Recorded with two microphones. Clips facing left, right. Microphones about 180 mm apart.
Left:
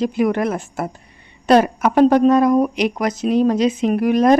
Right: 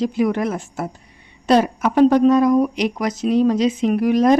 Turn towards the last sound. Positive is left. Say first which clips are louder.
# left 1 dB
turn(degrees=55)  # may be behind; listen again after turning